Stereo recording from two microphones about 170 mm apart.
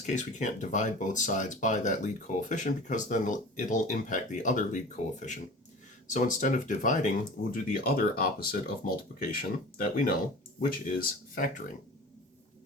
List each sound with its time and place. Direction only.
0.0 s speech: 45° left (ahead or behind)
6.1 s speech: 50° left (ahead or behind)